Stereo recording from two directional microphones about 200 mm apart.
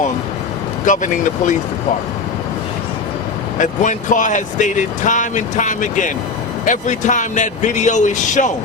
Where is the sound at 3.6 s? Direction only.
40° left (ahead or behind).